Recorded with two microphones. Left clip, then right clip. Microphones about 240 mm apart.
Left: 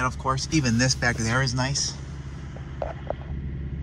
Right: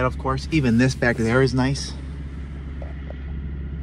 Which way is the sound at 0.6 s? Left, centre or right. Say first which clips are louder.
Right 5 dB; centre.